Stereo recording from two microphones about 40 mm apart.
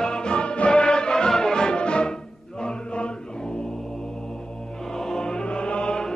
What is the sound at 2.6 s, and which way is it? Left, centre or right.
Chant, left.